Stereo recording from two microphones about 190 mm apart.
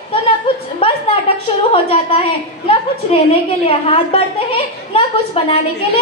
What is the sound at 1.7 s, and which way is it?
Speech, 30° left (ahead or behind).